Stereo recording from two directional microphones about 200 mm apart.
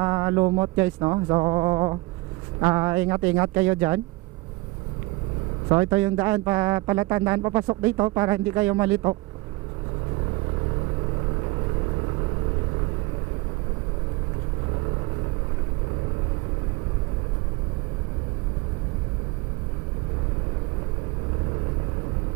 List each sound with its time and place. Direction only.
0.0 s speech: 20° right (ahead or behind)
5.7 s speech: 15° right (ahead or behind)